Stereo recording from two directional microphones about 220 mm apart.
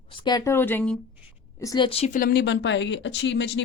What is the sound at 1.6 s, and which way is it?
A woman's voice, 20° left (ahead or behind).